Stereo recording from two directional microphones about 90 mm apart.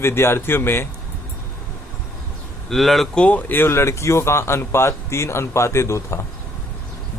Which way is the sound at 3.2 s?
20° left (ahead or behind).